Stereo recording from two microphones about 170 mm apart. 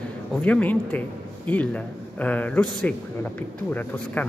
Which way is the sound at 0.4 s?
10° left (ahead or behind).